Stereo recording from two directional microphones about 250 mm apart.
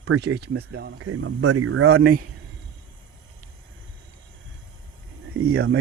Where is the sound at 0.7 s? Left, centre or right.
Right.